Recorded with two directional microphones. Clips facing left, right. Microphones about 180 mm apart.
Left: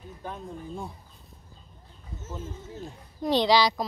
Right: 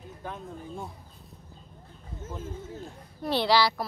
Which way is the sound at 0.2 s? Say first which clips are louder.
Left 1 dB; centre (ahead or behind).